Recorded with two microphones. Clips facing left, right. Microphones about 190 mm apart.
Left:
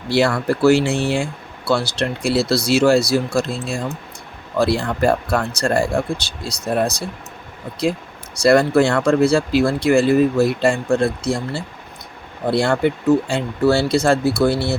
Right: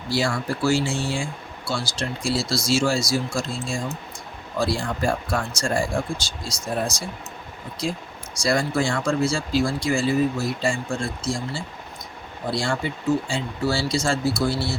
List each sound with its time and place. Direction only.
0.1 s speech: 60° left (ahead or behind)
8.4 s speech: 60° left (ahead or behind)